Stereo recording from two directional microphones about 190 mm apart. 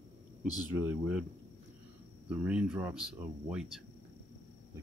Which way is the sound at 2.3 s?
5° right (ahead or behind).